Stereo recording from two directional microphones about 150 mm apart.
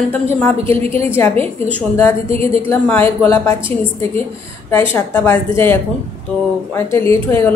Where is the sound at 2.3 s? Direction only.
40° right (ahead or behind).